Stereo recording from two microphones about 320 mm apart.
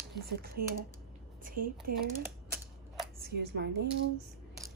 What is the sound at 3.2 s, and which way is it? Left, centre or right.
Speech, right.